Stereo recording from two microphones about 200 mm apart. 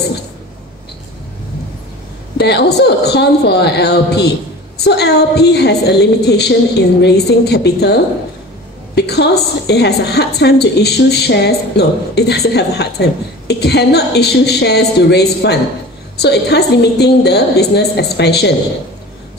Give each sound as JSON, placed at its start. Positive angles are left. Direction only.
{"t": 2.3, "sound": "a woman's voice", "side_deg": 55}